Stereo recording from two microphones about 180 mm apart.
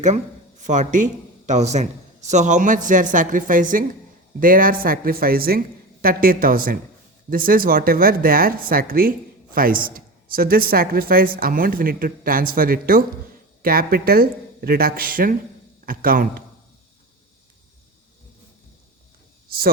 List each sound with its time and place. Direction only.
0.6 s speech: 45° right (ahead or behind)
19.5 s a woman's voice: 55° right (ahead or behind)